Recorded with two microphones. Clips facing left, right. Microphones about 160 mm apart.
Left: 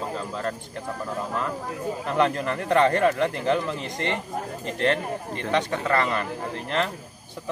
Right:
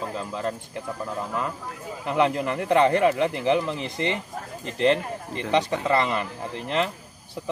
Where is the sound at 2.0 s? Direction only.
15° right (ahead or behind).